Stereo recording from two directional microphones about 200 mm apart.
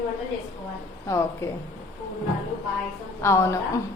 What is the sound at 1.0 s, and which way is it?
Speech, 15° left (ahead or behind).